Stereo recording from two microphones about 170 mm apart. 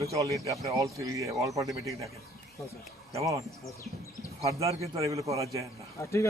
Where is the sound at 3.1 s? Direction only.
20° right (ahead or behind).